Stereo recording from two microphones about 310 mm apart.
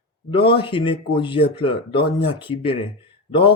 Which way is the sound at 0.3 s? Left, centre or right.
Centre.